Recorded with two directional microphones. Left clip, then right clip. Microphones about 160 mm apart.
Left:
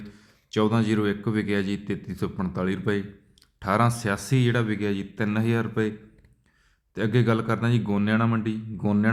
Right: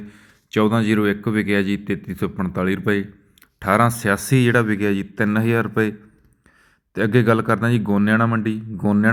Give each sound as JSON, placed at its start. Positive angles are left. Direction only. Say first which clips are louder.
{"t": 0.1, "sound": "a man's voice", "louder": "right 6 dB", "side_deg": -30}
{"t": 6.9, "sound": "speech", "louder": "right 7 dB", "side_deg": -35}